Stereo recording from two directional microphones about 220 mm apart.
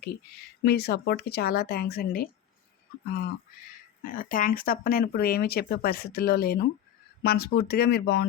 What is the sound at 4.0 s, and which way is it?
A woman's voice, 40° left (ahead or behind).